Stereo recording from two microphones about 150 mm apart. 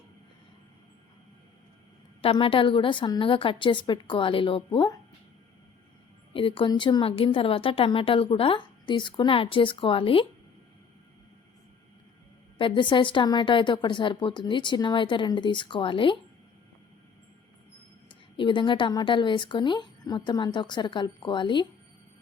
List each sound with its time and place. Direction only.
2.2 s a woman's voice: 35° left (ahead or behind)
6.3 s a woman's voice: 35° left (ahead or behind)
12.5 s a woman's voice: 35° left (ahead or behind)
18.1 s a woman's voice: 35° left (ahead or behind)